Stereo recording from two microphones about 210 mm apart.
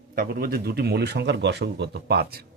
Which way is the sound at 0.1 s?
45° right (ahead or behind).